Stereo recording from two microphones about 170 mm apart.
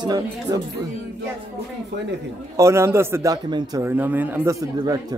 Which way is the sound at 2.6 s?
15° right (ahead or behind).